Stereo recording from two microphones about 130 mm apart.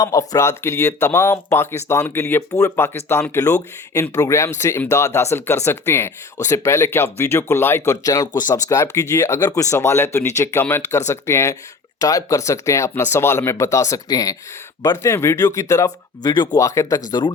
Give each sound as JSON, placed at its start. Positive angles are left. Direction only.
{"t": 0.0, "sound": "speech", "side_deg": 25}
{"t": 16.3, "sound": "speech", "side_deg": 35}
{"t": 16.6, "sound": "speech", "side_deg": 25}